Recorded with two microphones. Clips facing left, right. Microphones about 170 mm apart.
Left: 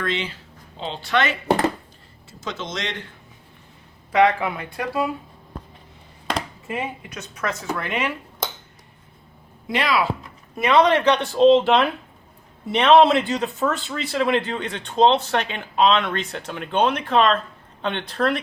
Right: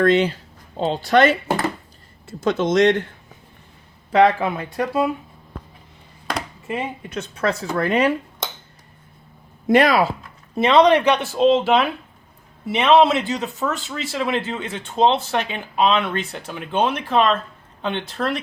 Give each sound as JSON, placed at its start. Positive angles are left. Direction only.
{"t": 0.0, "sound": "speech", "side_deg": -45}
{"t": 2.4, "sound": "speech", "side_deg": -55}
{"t": 4.2, "sound": "speech", "side_deg": -25}
{"t": 7.1, "sound": "speech", "side_deg": -30}
{"t": 9.6, "sound": "speech", "side_deg": -45}
{"t": 10.5, "sound": "speech", "side_deg": -25}